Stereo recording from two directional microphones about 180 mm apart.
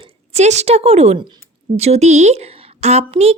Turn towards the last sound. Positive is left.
turn(degrees=-35)  # may be behind; listen again after turning